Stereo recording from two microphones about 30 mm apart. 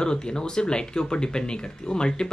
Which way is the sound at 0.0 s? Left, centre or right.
Left.